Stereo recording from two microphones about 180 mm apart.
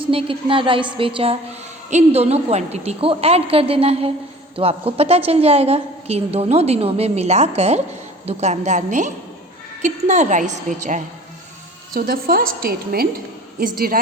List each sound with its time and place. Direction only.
0.0 s a woman's voice: 30° right (ahead or behind)
11.9 s a woman's voice: 55° right (ahead or behind)